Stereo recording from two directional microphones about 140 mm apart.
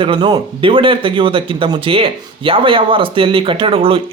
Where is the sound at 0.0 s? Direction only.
35° right (ahead or behind).